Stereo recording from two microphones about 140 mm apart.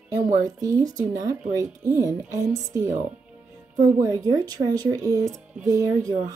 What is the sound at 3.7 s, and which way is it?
Speech, 65° right (ahead or behind).